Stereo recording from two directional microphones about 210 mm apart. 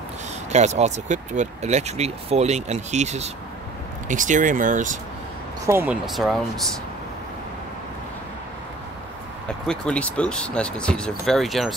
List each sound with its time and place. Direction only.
0.5 s speech: 35° right (ahead or behind)
5.7 s speech: 10° right (ahead or behind)
9.7 s speech: 5° left (ahead or behind)